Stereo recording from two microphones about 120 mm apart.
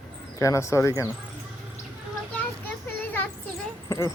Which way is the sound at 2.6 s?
15° left (ahead or behind).